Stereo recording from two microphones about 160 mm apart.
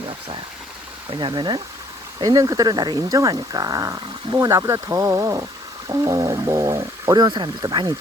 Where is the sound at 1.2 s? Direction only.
30° right (ahead or behind).